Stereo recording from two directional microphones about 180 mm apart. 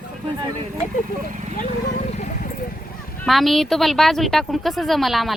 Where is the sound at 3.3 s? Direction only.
Centre (ahead or behind).